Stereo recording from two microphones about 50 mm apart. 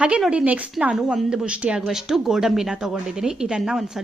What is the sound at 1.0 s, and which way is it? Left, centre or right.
Speech, centre.